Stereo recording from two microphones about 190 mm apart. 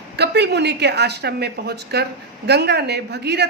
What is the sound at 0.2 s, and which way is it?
A woman's voice, 60° right (ahead or behind).